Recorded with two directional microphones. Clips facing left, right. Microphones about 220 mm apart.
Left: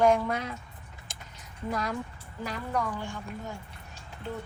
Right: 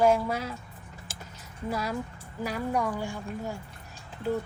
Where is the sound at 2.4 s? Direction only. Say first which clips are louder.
Right 3 dB; 10° right (ahead or behind).